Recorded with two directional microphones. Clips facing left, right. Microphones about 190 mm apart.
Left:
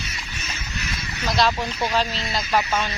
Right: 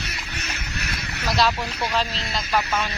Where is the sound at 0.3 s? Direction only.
65° right (ahead or behind).